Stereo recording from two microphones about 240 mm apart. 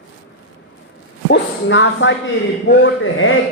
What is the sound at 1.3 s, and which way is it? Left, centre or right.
A woman's voice, left.